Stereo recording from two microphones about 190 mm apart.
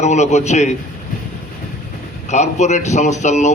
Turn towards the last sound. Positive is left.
turn(degrees=40)  # may be behind; listen again after turning